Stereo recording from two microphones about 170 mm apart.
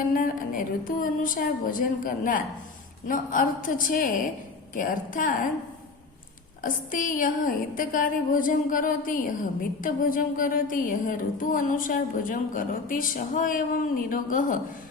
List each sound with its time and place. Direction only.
0.1 s a woman's voice: 55° left (ahead or behind)
6.6 s a woman's voice: 50° left (ahead or behind)